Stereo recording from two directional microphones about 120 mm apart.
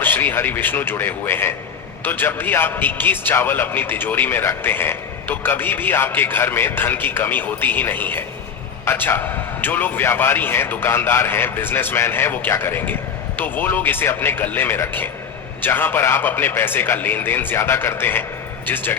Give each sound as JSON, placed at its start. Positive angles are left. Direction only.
{"t": 0.0, "sound": "a man's voice", "side_deg": 15}